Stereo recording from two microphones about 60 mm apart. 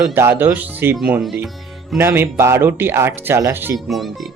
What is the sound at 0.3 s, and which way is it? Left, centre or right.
Speech, right.